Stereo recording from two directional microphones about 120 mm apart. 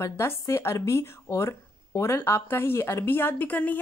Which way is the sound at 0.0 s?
20° left (ahead or behind).